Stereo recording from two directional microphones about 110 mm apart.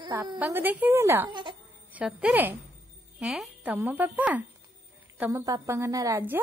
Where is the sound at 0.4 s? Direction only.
15° right (ahead or behind).